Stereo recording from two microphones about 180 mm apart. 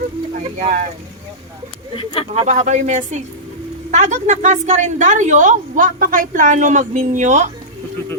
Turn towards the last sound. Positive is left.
turn(degrees=-40)  # may be behind; listen again after turning